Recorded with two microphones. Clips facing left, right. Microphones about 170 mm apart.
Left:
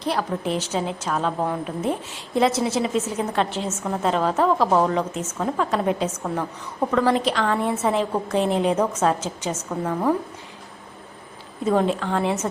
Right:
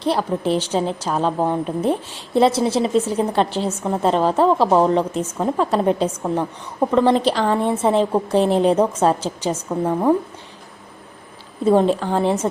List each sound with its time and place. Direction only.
0.0 s a woman's voice: 30° right (ahead or behind)
11.6 s a woman's voice: 30° right (ahead or behind)